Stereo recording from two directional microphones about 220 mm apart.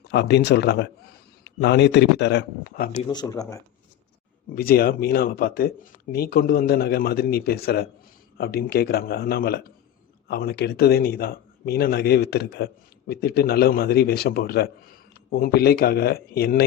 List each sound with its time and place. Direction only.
0.1 s speech: 50° left (ahead or behind)
2.9 s speech: 25° left (ahead or behind)
4.5 s speech: 45° left (ahead or behind)